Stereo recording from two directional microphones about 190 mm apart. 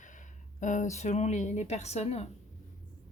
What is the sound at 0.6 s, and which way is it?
A woman's voice, 40° left (ahead or behind).